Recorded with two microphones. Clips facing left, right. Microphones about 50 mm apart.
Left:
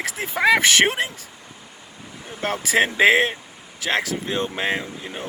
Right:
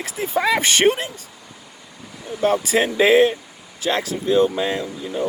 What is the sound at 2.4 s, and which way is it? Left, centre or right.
Speech, left.